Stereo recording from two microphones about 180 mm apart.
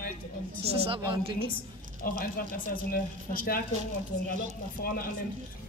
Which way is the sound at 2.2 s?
55° left (ahead or behind).